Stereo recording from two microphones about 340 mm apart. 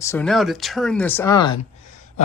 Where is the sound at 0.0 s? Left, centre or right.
Centre.